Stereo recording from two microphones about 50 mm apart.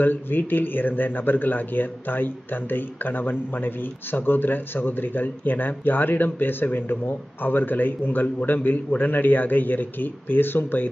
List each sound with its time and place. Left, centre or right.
0.0 s speech: left